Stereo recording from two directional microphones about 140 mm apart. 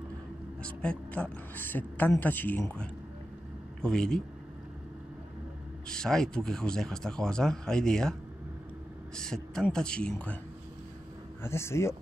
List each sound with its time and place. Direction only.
0.6 s a woman's voice: 10° left (ahead or behind)
5.9 s speech: 5° left (ahead or behind)
11.4 s speech: 20° left (ahead or behind)